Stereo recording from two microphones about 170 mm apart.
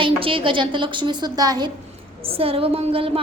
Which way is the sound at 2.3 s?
35° right (ahead or behind).